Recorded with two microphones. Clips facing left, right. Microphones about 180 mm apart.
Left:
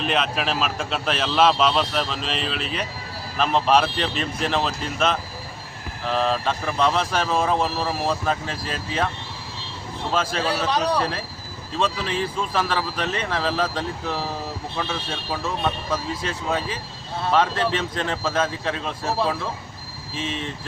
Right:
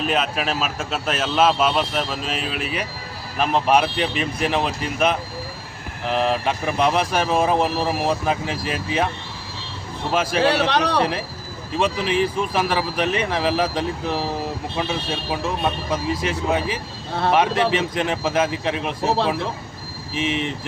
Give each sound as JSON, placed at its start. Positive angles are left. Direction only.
{"t": 0.0, "sound": "a man's voice", "side_deg": -5}
{"t": 6.1, "sound": "speech", "side_deg": -15}
{"t": 10.1, "sound": "speech", "side_deg": -15}
{"t": 10.4, "sound": "speech", "side_deg": -70}
{"t": 11.8, "sound": "speech", "side_deg": -15}
{"t": 20.1, "sound": "speech", "side_deg": -15}